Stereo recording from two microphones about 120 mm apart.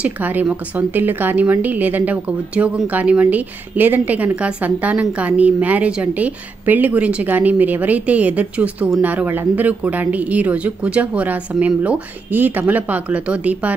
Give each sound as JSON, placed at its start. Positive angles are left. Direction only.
{"t": 0.0, "sound": "speech", "side_deg": -15}